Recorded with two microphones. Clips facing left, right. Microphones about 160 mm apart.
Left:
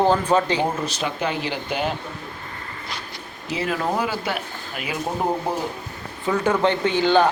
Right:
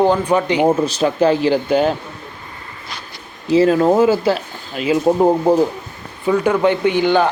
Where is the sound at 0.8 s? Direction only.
35° right (ahead or behind).